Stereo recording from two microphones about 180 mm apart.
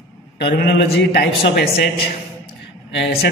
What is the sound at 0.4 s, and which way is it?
A man's voice, 65° left (ahead or behind).